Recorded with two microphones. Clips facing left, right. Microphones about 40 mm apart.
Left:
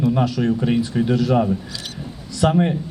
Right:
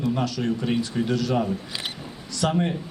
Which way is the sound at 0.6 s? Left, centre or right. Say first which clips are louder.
Left 5 dB; centre.